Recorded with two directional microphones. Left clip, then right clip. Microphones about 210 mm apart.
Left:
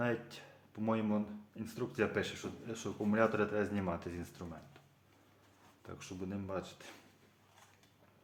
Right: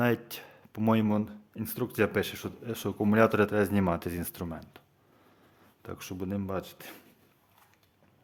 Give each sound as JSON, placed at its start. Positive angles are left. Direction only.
{"t": 0.0, "sound": "speech", "side_deg": -60}
{"t": 5.8, "sound": "speech", "side_deg": -60}